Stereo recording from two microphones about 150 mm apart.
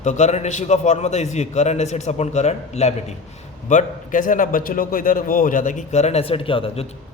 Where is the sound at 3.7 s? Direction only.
60° left (ahead or behind).